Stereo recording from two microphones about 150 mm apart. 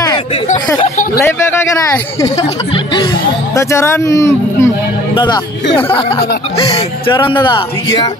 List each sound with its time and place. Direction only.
0.7 s speech: 60° left (ahead or behind)
1.2 s a man's voice: 15° left (ahead or behind)
2.7 s a man's voice: 30° left (ahead or behind)
3.5 s speech: 20° left (ahead or behind)
5.1 s a man's voice: 30° left (ahead or behind)